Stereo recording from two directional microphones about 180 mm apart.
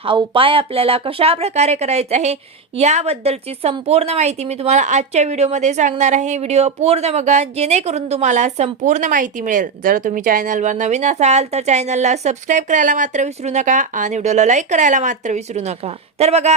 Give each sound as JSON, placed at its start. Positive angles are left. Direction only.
{"t": 0.0, "sound": "speech", "side_deg": -30}